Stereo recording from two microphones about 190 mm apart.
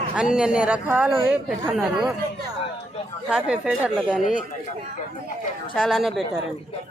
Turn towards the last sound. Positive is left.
turn(degrees=0)  # may be behind; listen again after turning